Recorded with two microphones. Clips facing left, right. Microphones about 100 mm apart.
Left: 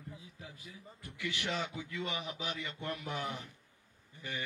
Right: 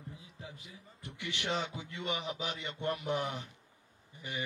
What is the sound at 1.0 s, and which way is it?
A man's voice, 20° right (ahead or behind).